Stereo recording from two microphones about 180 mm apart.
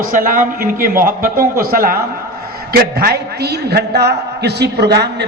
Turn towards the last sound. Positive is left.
turn(degrees=-65)  # may be behind; listen again after turning